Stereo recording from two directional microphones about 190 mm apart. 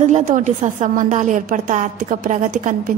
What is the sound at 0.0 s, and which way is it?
A woman's voice, 40° right (ahead or behind).